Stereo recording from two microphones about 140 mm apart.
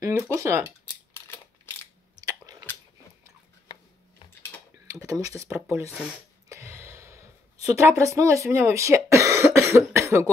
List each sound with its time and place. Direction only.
0.0 s speech: 20° right (ahead or behind)
2.5 s biting: 25° right (ahead or behind)
4.9 s speech: 25° right (ahead or behind)
6.5 s a sound: 20° right (ahead or behind)
7.7 s speech: 20° right (ahead or behind)